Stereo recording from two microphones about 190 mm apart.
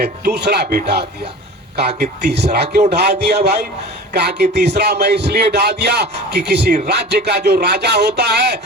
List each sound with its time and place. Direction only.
0.0 s speech: 60° right (ahead or behind)